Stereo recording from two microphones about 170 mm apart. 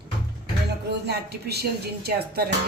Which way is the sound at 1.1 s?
75° right (ahead or behind).